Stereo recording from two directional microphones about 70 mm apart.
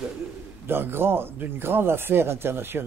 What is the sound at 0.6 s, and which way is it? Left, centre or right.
A man's voice, right.